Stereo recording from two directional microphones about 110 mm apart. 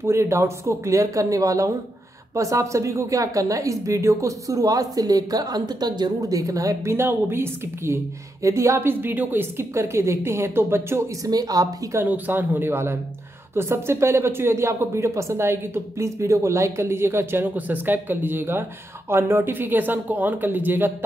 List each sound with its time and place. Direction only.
0.0 s a woman's voice: 25° right (ahead or behind)
11.2 s a woman's voice: 35° right (ahead or behind)
12.0 s a woman's voice: 20° right (ahead or behind)